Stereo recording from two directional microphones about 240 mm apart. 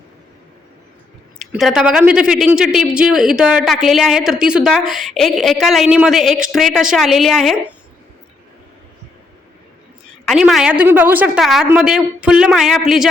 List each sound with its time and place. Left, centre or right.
1.4 s speech: centre
10.2 s speech: centre